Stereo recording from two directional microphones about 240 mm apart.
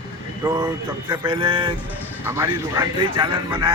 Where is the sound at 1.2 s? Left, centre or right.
Right.